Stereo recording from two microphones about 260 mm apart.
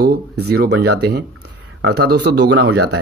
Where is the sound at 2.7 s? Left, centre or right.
Right.